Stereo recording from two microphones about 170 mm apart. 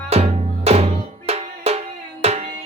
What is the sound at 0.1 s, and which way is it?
Music, 35° right (ahead or behind).